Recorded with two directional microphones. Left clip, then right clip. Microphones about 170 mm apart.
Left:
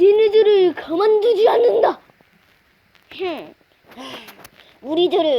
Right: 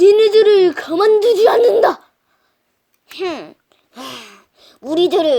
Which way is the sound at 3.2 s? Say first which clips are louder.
Right 3 dB; 25° right (ahead or behind).